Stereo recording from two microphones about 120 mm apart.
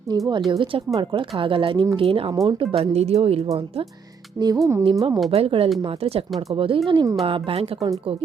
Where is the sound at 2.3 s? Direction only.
35° right (ahead or behind).